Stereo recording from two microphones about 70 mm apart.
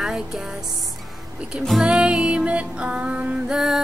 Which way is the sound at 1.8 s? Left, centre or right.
Centre.